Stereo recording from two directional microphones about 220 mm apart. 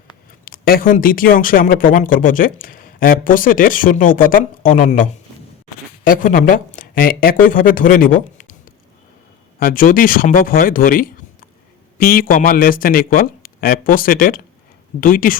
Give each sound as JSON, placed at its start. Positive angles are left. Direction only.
{"t": 0.4, "sound": "speech", "side_deg": 40}
{"t": 6.1, "sound": "speech", "side_deg": 40}
{"t": 9.6, "sound": "speech", "side_deg": 40}